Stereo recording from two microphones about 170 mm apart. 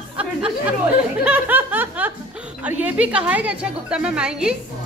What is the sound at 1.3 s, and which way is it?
Snicker, 10° right (ahead or behind).